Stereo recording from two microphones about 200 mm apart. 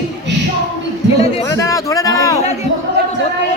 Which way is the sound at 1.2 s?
15° left (ahead or behind).